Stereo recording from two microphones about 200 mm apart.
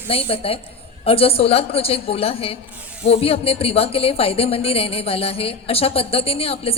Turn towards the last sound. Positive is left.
turn(degrees=30)  # may be behind; listen again after turning